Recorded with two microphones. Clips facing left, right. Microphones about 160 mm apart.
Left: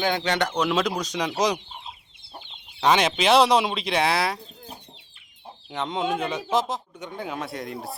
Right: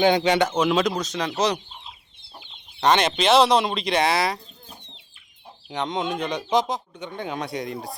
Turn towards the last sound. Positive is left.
turn(degrees=0)  # may be behind; listen again after turning